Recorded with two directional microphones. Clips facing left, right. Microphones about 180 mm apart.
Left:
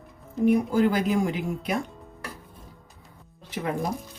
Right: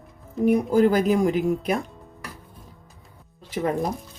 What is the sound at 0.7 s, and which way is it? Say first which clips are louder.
Speech: right 4 dB; 40° right (ahead or behind).